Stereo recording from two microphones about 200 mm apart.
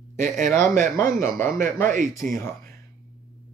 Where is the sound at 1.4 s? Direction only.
45° right (ahead or behind).